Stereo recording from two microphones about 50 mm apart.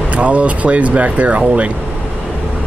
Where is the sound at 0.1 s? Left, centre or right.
Right.